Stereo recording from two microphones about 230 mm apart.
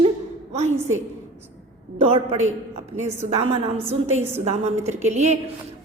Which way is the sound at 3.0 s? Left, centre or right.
Right.